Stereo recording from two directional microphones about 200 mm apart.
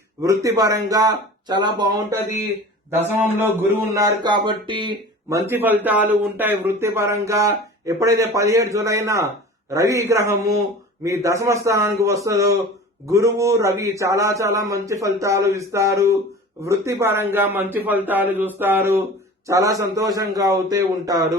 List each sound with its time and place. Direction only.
0.2 s speech: 15° right (ahead or behind)
3.0 s speech: 10° right (ahead or behind)
5.5 s speech: 10° right (ahead or behind)